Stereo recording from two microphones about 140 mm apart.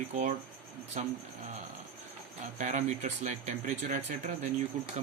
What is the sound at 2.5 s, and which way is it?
Speech, 60° right (ahead or behind).